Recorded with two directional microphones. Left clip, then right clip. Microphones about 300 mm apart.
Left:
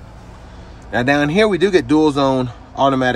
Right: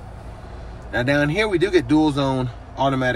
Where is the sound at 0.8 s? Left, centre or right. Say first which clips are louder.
Left 4 dB; centre.